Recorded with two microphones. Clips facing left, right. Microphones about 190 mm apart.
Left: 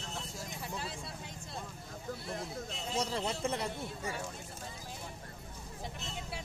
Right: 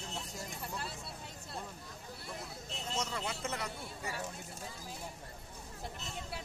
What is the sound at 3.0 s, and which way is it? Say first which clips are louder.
Speech: left 6 dB; 30° left (ahead or behind).